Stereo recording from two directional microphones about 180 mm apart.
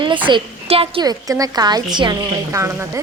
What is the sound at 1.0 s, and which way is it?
A woman's voice, 20° right (ahead or behind).